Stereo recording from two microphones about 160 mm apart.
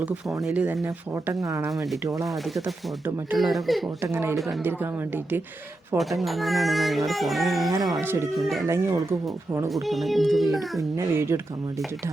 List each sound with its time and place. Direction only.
0.4 s speech: 10° right (ahead or behind)
3.3 s speech: centre (ahead or behind)
4.0 s speech: 15° right (ahead or behind)
6.0 s speech: centre (ahead or behind)
8.0 s speech: 15° right (ahead or behind)
8.4 s speech: centre (ahead or behind)
8.6 s speech: 15° right (ahead or behind)
9.6 s speech: centre (ahead or behind)
10.9 s speech: 15° right (ahead or behind)